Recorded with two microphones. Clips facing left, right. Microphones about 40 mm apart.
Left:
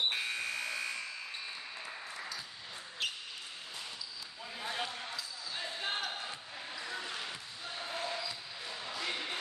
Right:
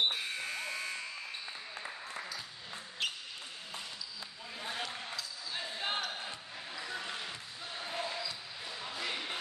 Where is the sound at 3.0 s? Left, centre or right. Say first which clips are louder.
Right 1 dB; centre.